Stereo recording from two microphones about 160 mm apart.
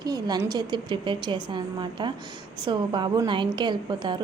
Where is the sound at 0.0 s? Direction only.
25° right (ahead or behind).